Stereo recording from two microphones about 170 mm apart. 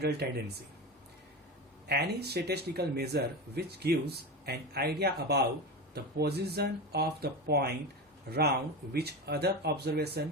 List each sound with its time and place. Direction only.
0.0 s speech: 70° right (ahead or behind)
1.9 s speech: 70° right (ahead or behind)
8.9 s speech: 70° right (ahead or behind)